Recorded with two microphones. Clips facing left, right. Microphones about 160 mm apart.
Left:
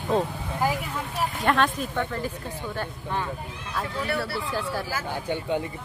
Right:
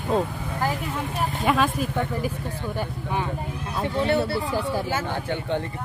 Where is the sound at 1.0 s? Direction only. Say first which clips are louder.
Right 2 dB; 5° right (ahead or behind).